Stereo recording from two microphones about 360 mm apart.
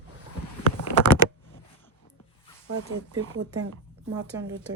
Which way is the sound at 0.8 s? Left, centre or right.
Left.